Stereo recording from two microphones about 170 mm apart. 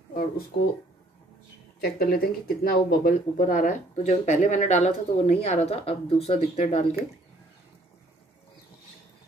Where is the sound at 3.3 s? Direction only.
50° left (ahead or behind).